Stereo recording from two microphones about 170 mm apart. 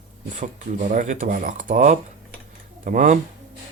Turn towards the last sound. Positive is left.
turn(degrees=-50)  # may be behind; listen again after turning